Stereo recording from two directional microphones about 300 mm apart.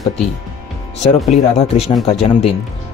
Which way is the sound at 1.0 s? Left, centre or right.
Left.